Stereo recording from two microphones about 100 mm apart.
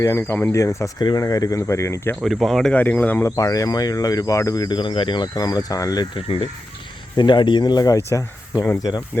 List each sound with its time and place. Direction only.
0.0 s speech: 30° left (ahead or behind)
0.5 s speech: 30° left (ahead or behind)
0.9 s speech: 45° left (ahead or behind)
2.2 s speech: centre (ahead or behind)
2.7 s speech: 15° left (ahead or behind)
3.2 s speech: 35° left (ahead or behind)
4.8 s speech: 55° left (ahead or behind); by 6.1 s 35° left (ahead or behind)
6.1 s speech: 70° left (ahead or behind)
7.2 s speech: 50° left (ahead or behind)